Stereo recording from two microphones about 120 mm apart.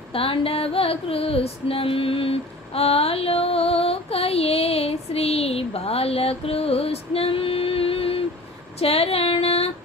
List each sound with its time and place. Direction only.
0.1 s female singing: 50° left (ahead or behind)